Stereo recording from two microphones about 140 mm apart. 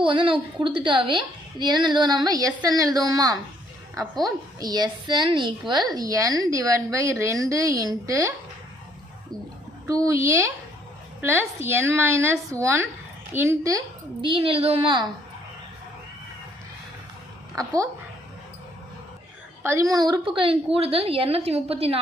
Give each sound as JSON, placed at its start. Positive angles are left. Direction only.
{"t": 0.0, "sound": "a woman's voice", "side_deg": -35}
{"t": 9.8, "sound": "a woman's voice", "side_deg": -25}
{"t": 14.2, "sound": "a woman's voice", "side_deg": -40}
{"t": 17.6, "sound": "a woman's voice", "side_deg": -25}
{"t": 19.6, "sound": "a woman's voice", "side_deg": -20}